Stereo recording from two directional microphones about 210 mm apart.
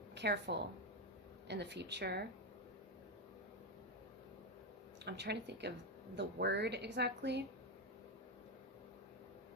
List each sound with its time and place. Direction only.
0.1 s a woman's voice: 55° right (ahead or behind)
5.0 s a woman's voice: 55° right (ahead or behind)